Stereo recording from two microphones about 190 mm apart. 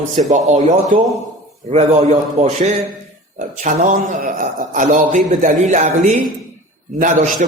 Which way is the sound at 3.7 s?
45° right (ahead or behind).